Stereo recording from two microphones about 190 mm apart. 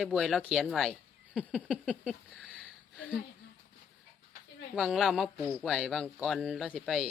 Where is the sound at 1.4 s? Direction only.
5° left (ahead or behind).